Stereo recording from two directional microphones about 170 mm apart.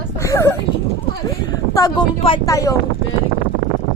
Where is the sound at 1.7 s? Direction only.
20° left (ahead or behind).